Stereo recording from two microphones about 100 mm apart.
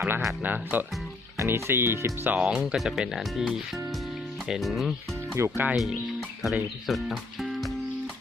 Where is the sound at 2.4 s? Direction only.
10° right (ahead or behind).